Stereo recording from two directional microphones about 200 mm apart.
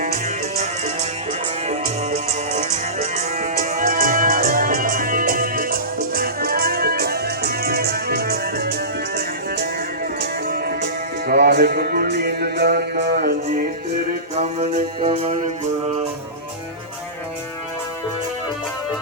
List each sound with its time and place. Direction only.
0.0 s music: 40° right (ahead or behind)
10.2 s music: 50° right (ahead or behind)
14.3 s music: 35° right (ahead or behind)